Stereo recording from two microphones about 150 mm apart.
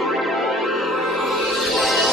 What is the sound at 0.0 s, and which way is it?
Music, centre (ahead or behind).